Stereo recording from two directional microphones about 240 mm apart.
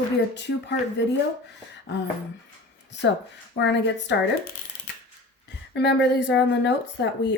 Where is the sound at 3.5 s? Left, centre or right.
Left.